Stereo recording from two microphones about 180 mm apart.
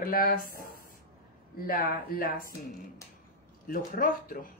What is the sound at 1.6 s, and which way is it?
Speech, 50° left (ahead or behind).